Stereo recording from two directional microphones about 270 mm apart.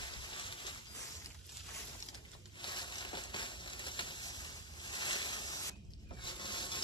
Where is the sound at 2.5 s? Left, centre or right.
Centre.